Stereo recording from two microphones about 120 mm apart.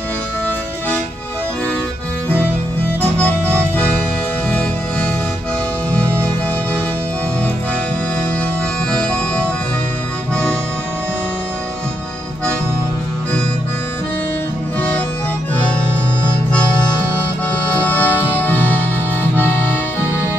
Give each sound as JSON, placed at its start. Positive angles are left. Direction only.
{"t": 4.5, "sound": "music", "side_deg": 10}
{"t": 17.8, "sound": "music", "side_deg": 15}
{"t": 19.3, "sound": "accordion", "side_deg": 20}